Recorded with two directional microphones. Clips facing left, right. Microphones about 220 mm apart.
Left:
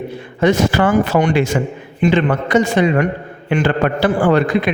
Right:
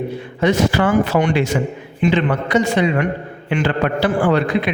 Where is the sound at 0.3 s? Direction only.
45° left (ahead or behind).